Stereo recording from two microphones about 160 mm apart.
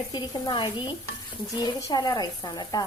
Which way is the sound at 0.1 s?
25° left (ahead or behind).